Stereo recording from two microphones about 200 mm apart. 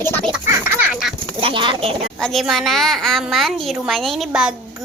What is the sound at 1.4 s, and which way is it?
Speech, 25° right (ahead or behind).